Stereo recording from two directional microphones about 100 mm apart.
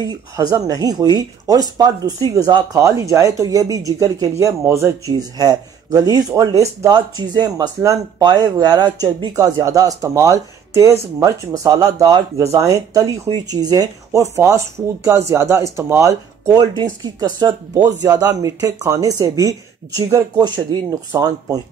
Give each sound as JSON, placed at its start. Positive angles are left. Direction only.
{"t": 0.0, "sound": "speech", "side_deg": -40}
{"t": 7.0, "sound": "speech", "side_deg": -45}
{"t": 20.3, "sound": "speech", "side_deg": -45}